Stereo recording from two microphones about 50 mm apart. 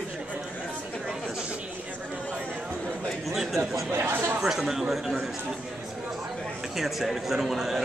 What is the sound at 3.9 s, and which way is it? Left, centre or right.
Speech, right.